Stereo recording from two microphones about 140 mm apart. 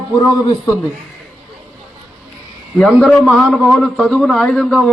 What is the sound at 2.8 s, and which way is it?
A man's voice, centre (ahead or behind).